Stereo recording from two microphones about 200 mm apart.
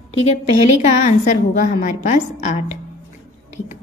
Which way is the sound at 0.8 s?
35° left (ahead or behind).